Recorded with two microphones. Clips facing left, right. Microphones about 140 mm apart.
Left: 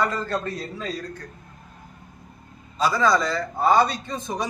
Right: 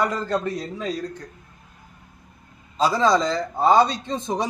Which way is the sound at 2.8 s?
25° right (ahead or behind).